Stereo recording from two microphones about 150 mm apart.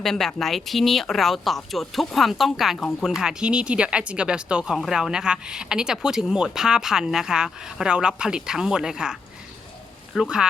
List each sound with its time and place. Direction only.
0.0 s speech: centre (ahead or behind)
10.2 s speech: 5° right (ahead or behind)